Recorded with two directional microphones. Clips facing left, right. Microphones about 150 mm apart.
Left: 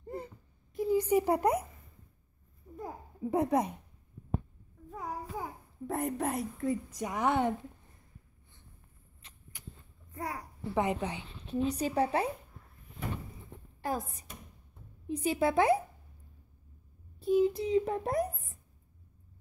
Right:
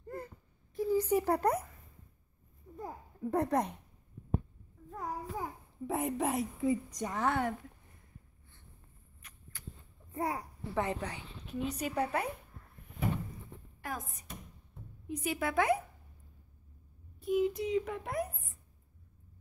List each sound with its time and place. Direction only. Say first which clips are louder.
0.0 s a sound: left 2 dB; 20° left (ahead or behind)
0.7 s speech: left 2 dB; 20° left (ahead or behind)
2.8 s a child's voice: left 1 dB; 10° left (ahead or behind)
4.9 s a child's voice: even; centre (ahead or behind)
7.2 s speech: left 3 dB; 20° left (ahead or behind)
9.2 s rodents: even; 30° left (ahead or behind)
10.1 s a child's voice: right 4 dB; 25° right (ahead or behind)
10.7 s speech: left 4 dB; 15° left (ahead or behind)
13.7 s speech: left 7 dB; 30° left (ahead or behind)
17.2 s a child's voice: left 4 dB; 30° left (ahead or behind)